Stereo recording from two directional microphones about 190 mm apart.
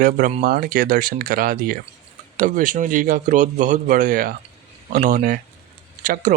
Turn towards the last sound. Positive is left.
turn(degrees=-45)  # may be behind; listen again after turning